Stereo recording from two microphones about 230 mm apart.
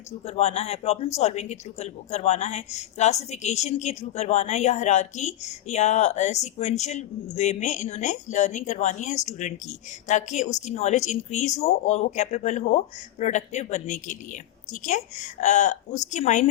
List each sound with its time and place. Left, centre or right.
0.3 s speech: left